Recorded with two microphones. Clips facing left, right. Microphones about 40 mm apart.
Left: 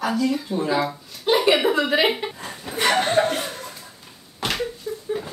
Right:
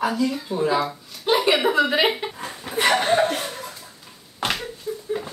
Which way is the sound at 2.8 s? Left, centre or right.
Centre.